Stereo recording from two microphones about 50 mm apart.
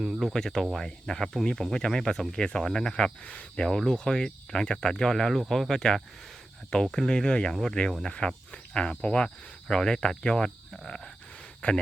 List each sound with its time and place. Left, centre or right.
0.3 s speech: centre
3.2 s speech: left
3.7 s speech: centre
11.6 s speech: left